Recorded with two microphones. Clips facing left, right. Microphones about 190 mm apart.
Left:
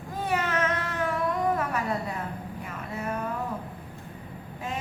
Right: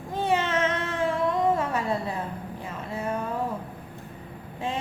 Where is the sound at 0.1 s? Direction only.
25° right (ahead or behind).